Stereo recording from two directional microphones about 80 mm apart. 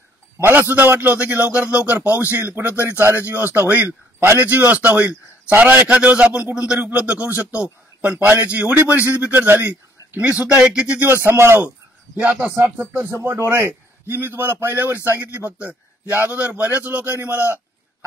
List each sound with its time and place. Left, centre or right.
0.5 s a man's voice: right
2.7 s speech: left
3.0 s a man's voice: right; by 11.0 s centre
11.1 s a man's voice: right
12.2 s a man's voice: centre